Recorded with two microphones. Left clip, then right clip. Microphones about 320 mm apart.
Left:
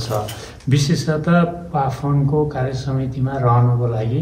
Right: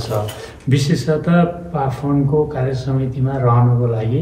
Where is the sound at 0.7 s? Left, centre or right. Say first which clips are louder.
Right 2 dB; centre.